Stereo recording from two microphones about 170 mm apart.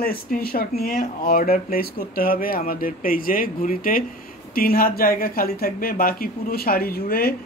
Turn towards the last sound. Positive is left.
turn(degrees=60)  # may be behind; listen again after turning